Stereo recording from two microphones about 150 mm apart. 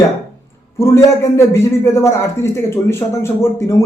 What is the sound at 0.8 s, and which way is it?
A man's voice, 20° left (ahead or behind).